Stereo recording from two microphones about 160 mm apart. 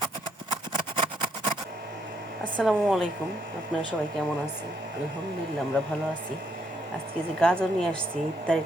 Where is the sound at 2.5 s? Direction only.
Centre (ahead or behind).